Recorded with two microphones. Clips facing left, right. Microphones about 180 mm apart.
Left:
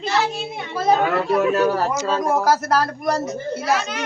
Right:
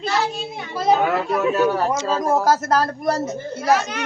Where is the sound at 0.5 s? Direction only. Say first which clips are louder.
Even; 5° right (ahead or behind).